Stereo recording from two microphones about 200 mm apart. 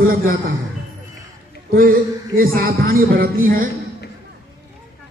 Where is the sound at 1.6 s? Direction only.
45° right (ahead or behind).